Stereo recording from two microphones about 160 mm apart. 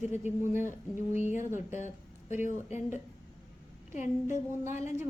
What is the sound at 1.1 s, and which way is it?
Speech, 50° left (ahead or behind).